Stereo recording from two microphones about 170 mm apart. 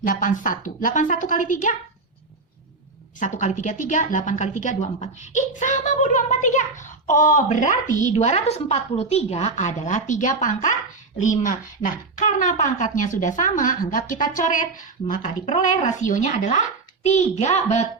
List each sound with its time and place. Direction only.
0.0 s a woman's voice: 50° left (ahead or behind)
3.2 s a woman's voice: 45° left (ahead or behind)